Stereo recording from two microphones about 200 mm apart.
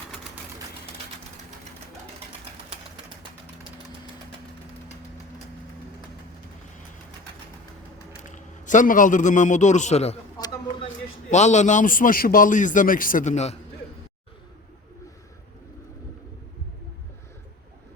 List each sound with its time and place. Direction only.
8.3 s a man's voice: 40° left (ahead or behind)